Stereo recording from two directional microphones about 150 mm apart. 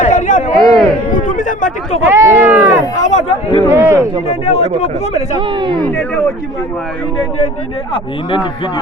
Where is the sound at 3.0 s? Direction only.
50° left (ahead or behind).